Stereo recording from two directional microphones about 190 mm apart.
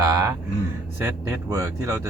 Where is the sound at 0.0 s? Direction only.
20° right (ahead or behind).